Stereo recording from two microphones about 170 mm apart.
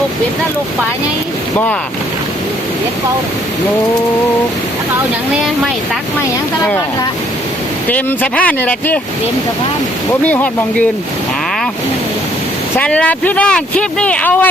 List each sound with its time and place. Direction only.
7.9 s speech: 10° left (ahead or behind)
10.2 s speech: 10° left (ahead or behind)
12.7 s speech: 10° left (ahead or behind)